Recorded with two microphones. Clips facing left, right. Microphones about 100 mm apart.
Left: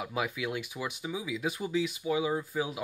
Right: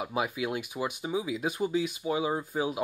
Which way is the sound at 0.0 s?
25° right (ahead or behind).